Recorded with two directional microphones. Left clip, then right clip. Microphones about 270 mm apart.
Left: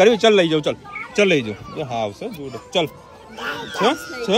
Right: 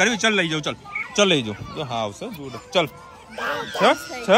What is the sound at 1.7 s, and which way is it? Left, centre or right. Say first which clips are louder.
Speech: left 2 dB; right.